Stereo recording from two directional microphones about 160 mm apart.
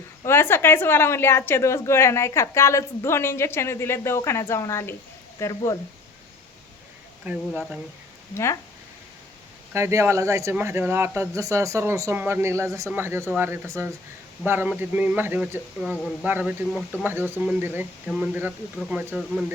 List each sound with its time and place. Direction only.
0.3 s a woman's voice: 15° left (ahead or behind)
7.3 s speech: 10° right (ahead or behind)
9.7 s speech: 15° right (ahead or behind)
18.9 s speech: 5° right (ahead or behind)